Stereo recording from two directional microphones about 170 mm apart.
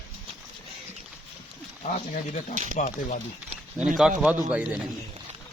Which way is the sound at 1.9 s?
45° left (ahead or behind).